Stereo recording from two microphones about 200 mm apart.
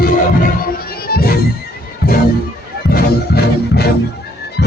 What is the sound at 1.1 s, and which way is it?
Music, 50° left (ahead or behind).